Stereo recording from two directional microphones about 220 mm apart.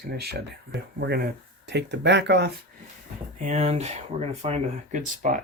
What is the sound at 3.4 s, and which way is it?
Speech, 30° right (ahead or behind).